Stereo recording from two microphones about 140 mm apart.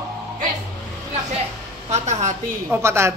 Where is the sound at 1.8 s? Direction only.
55° right (ahead or behind).